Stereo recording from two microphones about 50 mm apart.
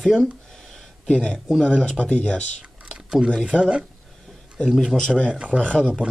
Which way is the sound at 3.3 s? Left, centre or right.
Centre.